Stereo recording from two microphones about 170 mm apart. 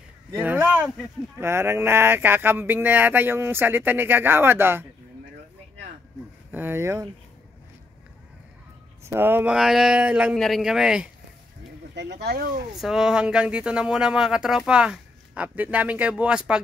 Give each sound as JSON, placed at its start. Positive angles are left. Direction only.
{"t": 0.4, "sound": "a sound", "side_deg": -10}
{"t": 1.4, "sound": "speech", "side_deg": -15}
{"t": 6.5, "sound": "speech", "side_deg": -10}
{"t": 9.0, "sound": "speech", "side_deg": -15}
{"t": 11.9, "sound": "speech", "side_deg": -85}
{"t": 12.8, "sound": "speech", "side_deg": 0}